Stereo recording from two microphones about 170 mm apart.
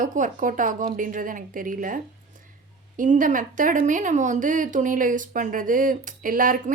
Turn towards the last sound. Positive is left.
turn(degrees=-55)  # may be behind; listen again after turning